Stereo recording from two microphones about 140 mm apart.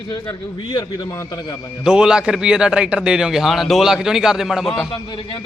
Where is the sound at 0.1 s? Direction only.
35° left (ahead or behind).